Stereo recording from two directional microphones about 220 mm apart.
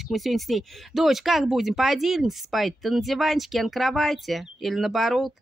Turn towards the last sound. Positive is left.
turn(degrees=0)  # may be behind; listen again after turning